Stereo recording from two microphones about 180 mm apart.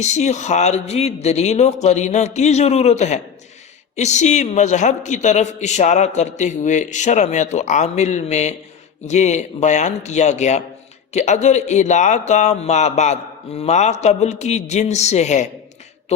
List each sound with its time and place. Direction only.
0.0 s a woman's voice: 40° left (ahead or behind)